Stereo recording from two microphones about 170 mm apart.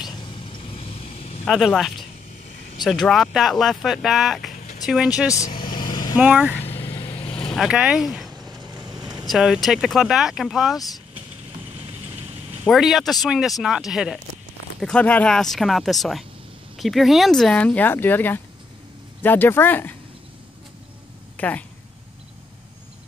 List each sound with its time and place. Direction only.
0.0 s a sound: 25° left (ahead or behind)
1.5 s speech: centre (ahead or behind)
5.3 s vehicle: 25° left (ahead or behind)
6.1 s speech: 10° right (ahead or behind)
6.6 s vehicle: 35° left (ahead or behind)
7.5 s speech: 5° right (ahead or behind)
8.5 s vehicle: 25° right (ahead or behind)
9.2 s speech: centre (ahead or behind)
12.6 s speech: centre (ahead or behind)
21.4 s speech: 10° left (ahead or behind)